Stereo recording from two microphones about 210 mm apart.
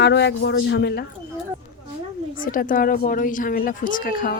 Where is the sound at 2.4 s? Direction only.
40° left (ahead or behind).